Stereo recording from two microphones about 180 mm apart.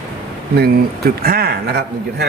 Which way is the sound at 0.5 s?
60° right (ahead or behind).